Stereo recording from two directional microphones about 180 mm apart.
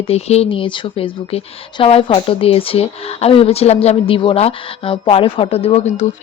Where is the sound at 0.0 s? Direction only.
35° left (ahead or behind).